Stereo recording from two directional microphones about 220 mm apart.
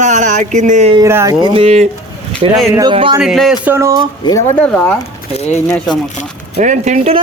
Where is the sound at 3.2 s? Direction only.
Centre (ahead or behind).